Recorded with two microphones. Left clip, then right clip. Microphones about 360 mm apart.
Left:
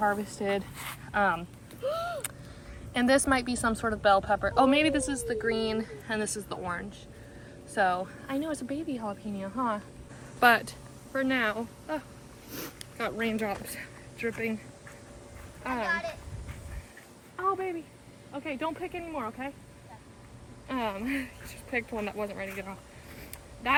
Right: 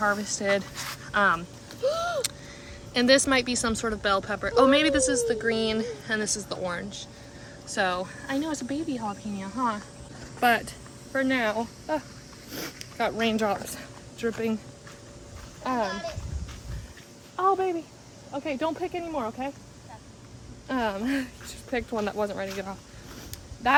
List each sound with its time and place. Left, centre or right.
0.0 s speech: centre
1.8 s a sound: right
2.9 s a woman's voice: centre
17.4 s a woman's voice: centre
20.7 s a woman's voice: centre